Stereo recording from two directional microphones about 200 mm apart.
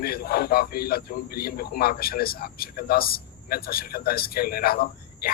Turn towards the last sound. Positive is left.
turn(degrees=50)  # may be behind; listen again after turning